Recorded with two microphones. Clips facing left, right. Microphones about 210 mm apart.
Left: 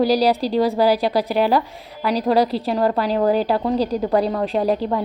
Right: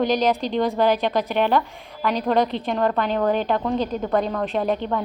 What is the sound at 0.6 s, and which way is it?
Speech, 10° left (ahead or behind).